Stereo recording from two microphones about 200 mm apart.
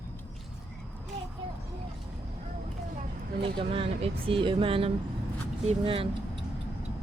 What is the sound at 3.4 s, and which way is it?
Speech, 25° right (ahead or behind).